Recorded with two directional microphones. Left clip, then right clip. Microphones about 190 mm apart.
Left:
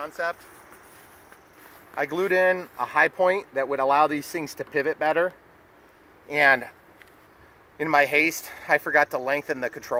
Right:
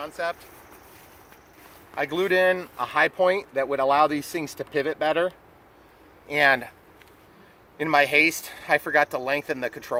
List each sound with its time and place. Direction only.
0.0 s speech: 10° left (ahead or behind)
2.0 s speech: 10° left (ahead or behind)
7.8 s speech: 10° left (ahead or behind)